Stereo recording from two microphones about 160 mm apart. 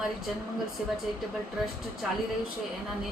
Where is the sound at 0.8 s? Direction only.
5° right (ahead or behind).